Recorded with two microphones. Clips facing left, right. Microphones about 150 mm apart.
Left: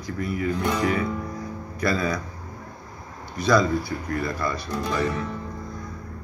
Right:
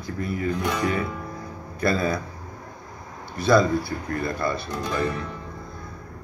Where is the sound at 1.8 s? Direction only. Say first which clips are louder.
Right 1 dB; 30° right (ahead or behind).